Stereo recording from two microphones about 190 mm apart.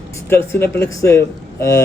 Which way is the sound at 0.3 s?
10° left (ahead or behind).